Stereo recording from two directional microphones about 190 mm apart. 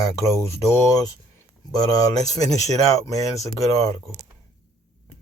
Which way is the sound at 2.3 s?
20° left (ahead or behind).